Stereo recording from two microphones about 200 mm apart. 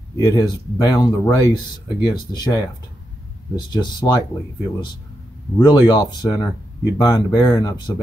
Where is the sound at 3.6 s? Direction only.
20° left (ahead or behind).